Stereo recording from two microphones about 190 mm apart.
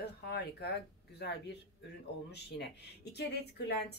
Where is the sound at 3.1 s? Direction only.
60° left (ahead or behind).